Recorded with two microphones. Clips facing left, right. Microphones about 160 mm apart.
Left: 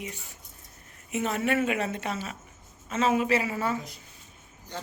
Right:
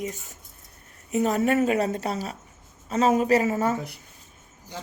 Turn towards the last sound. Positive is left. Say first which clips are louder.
# right 5 dB
turn(degrees=-40)  # may be behind; listen again after turning